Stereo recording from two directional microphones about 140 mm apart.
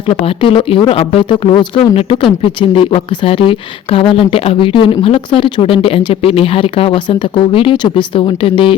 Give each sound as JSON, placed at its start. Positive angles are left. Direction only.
{"t": 0.1, "sound": "speech", "side_deg": 40}